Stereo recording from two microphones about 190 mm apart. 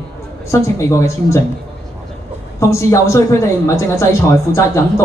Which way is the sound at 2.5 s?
15° left (ahead or behind).